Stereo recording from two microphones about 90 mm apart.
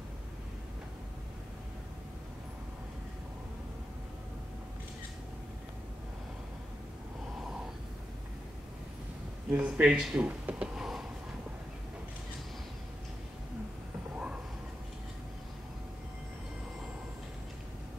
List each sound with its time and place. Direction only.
9.5 s speech: 15° right (ahead or behind)